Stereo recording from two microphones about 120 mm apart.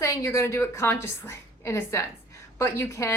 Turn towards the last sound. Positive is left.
turn(degrees=20)  # may be behind; listen again after turning